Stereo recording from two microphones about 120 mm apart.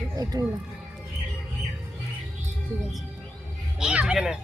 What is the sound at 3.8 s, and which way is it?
Speech, 10° right (ahead or behind).